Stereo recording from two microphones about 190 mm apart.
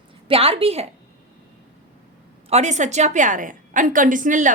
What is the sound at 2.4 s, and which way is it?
A woman's voice, 35° right (ahead or behind).